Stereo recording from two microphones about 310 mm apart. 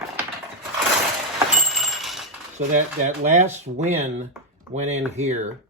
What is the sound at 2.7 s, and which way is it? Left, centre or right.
Speech, right.